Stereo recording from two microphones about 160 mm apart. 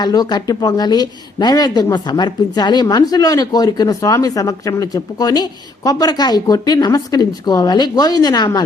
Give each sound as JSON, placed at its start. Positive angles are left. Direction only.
{"t": 0.0, "sound": "a woman's voice", "side_deg": 25}